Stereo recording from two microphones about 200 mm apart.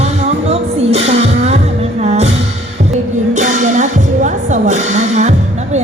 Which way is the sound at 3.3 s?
35° right (ahead or behind).